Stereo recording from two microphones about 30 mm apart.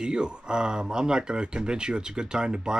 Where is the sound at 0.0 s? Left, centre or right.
Right.